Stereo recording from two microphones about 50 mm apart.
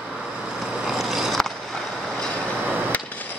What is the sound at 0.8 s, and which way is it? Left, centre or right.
Vehicle, centre.